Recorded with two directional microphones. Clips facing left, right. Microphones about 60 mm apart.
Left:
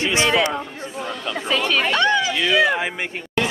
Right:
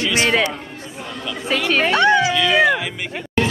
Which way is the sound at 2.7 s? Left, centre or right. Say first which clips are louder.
Even; left.